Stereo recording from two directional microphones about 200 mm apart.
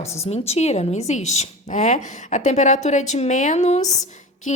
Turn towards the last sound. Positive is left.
turn(degrees=35)  # may be behind; listen again after turning